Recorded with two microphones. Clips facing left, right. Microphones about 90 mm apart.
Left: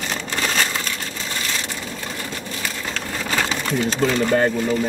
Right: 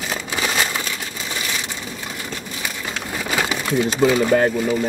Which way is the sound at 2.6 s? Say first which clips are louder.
Even; 10° right (ahead or behind).